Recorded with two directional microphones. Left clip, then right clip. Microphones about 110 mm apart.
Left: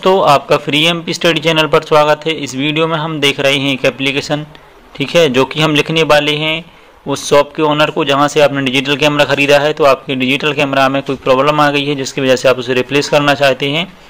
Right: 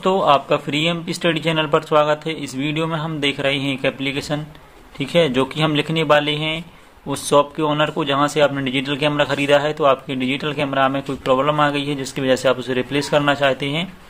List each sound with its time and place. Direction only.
0.0 s a man's voice: 15° left (ahead or behind)